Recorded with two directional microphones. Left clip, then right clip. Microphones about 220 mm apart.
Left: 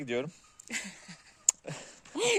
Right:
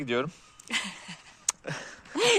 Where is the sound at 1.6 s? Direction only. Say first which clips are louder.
Right 6 dB; centre (ahead or behind).